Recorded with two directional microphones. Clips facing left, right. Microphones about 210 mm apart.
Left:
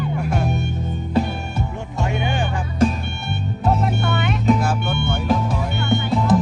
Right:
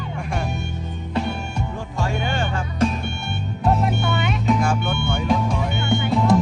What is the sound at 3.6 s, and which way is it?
Music, centre (ahead or behind).